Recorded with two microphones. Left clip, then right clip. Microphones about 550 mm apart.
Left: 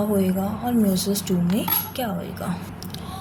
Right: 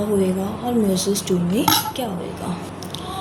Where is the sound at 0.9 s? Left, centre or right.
Left.